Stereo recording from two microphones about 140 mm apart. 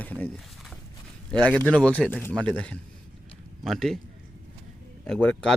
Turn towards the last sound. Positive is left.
turn(degrees=5)  # may be behind; listen again after turning